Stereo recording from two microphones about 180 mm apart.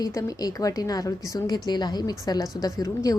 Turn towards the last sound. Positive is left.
turn(degrees=20)  # may be behind; listen again after turning